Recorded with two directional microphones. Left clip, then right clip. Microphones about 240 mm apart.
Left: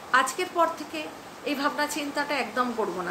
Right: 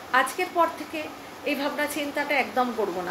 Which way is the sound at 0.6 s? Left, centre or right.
Centre.